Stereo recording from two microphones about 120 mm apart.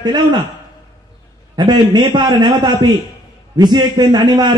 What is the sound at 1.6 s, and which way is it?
A man's voice, 35° right (ahead or behind).